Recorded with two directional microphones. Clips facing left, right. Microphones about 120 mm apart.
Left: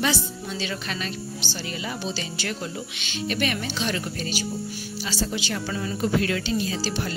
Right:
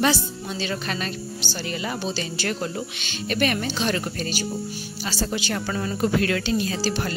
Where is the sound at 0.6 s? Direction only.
45° right (ahead or behind).